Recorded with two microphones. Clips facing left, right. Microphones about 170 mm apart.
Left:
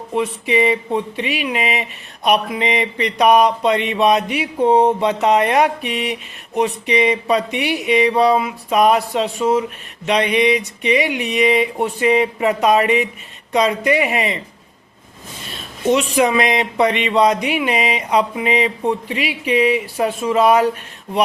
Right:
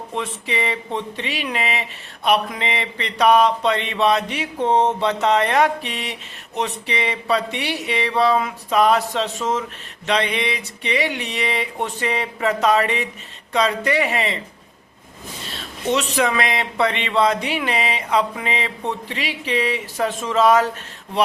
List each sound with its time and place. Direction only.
0.1 s speech: 10° left (ahead or behind)
15.5 s a sound: 10° left (ahead or behind)
16.1 s speech: 15° left (ahead or behind)